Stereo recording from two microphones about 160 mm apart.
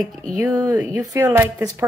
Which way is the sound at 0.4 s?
20° right (ahead or behind).